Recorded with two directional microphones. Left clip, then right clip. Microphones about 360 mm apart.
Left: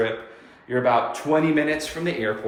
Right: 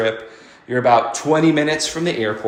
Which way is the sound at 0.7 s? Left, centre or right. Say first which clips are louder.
Right 6 dB; centre.